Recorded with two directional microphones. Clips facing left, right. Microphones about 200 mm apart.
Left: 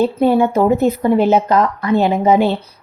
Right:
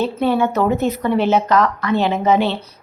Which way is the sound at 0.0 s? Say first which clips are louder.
Left 4 dB; 15° left (ahead or behind).